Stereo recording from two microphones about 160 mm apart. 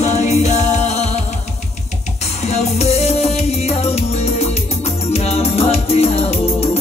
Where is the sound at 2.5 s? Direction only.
45° left (ahead or behind).